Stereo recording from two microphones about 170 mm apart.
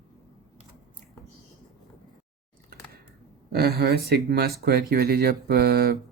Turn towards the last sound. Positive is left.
turn(degrees=-65)  # may be behind; listen again after turning